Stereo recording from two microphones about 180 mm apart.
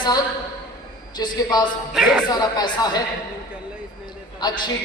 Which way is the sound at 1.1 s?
25° left (ahead or behind).